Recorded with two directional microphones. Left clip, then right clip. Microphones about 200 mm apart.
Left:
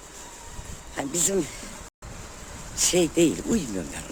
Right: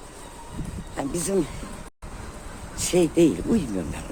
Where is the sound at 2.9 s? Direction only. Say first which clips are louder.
Right 3 dB; 20° left (ahead or behind).